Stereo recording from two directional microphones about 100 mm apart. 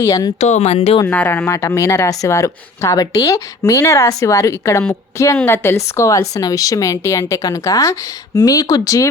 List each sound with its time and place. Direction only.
0.0 s speech: 35° left (ahead or behind)
0.3 s speech: 90° left
1.0 s speech: 20° left (ahead or behind)
1.5 s a woman's voice: 30° left (ahead or behind)